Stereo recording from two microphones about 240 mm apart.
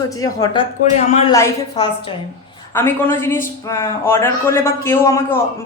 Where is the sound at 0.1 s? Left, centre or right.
Centre.